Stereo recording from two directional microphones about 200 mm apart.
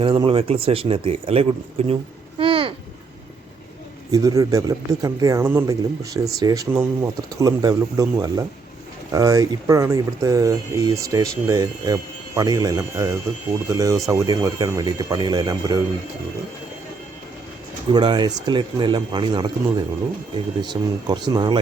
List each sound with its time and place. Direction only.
0.0 s speech: 25° right (ahead or behind)
2.4 s a sound: 25° right (ahead or behind)
4.1 s speech: 15° right (ahead or behind)
17.9 s speech: 20° right (ahead or behind)
20.6 s speech: 20° right (ahead or behind)